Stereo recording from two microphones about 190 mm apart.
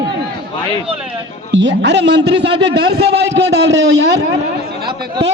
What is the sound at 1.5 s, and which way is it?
A woman's voice, 70° right (ahead or behind).